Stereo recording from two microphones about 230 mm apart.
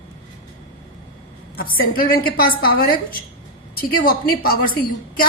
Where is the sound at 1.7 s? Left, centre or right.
Left.